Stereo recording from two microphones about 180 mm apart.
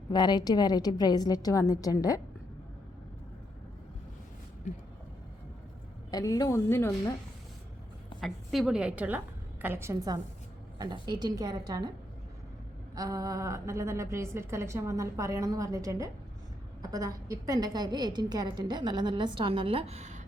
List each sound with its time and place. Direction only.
0.1 s a woman's voice: 25° left (ahead or behind)
6.1 s a woman's voice: 20° left (ahead or behind)
8.2 s a woman's voice: centre (ahead or behind); by 11.9 s 20° right (ahead or behind)
13.0 s a woman's voice: 20° right (ahead or behind); by 20.2 s 40° right (ahead or behind)